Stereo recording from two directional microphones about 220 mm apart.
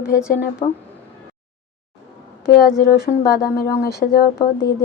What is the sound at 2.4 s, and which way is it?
Speech, 45° left (ahead or behind).